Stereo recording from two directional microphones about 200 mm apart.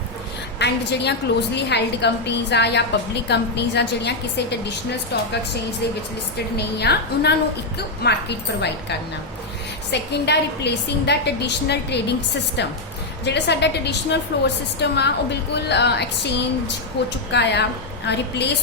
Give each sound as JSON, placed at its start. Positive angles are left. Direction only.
{"t": 0.6, "sound": "a woman's voice", "side_deg": 60}
{"t": 6.6, "sound": "a woman's voice", "side_deg": 55}